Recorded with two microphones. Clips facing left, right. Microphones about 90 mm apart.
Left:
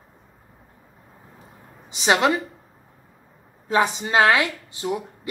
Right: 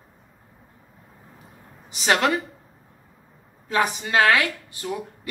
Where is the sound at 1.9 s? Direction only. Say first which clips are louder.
Left 2 dB; 20° left (ahead or behind).